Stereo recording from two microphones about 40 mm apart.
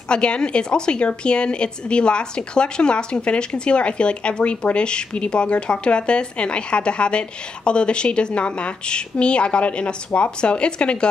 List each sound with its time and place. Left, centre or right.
0.1 s speech: left